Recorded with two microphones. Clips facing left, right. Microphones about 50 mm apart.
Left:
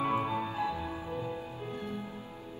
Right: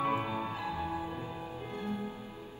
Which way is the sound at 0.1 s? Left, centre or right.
Right.